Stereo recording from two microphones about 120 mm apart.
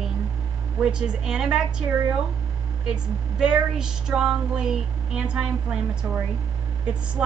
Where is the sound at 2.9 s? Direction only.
5° right (ahead or behind).